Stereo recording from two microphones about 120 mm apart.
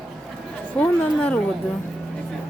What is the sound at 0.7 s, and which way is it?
Speech, 10° left (ahead or behind).